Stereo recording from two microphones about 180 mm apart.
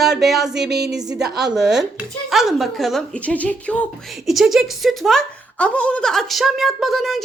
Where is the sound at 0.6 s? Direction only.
65° right (ahead or behind).